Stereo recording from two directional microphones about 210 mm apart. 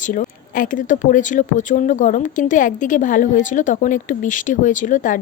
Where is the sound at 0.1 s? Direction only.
40° left (ahead or behind).